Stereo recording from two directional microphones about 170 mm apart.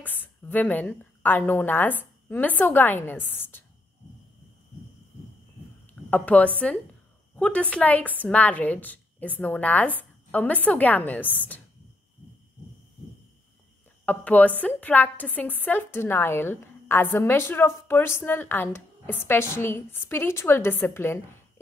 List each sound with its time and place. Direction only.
0.0 s a woman's voice: 10° left (ahead or behind)
6.0 s a woman's voice: 10° left (ahead or behind)
14.0 s a woman's voice: 10° left (ahead or behind)